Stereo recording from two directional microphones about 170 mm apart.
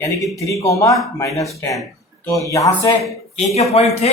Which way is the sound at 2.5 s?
20° left (ahead or behind).